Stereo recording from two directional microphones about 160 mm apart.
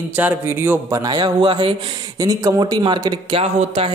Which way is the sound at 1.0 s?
25° right (ahead or behind).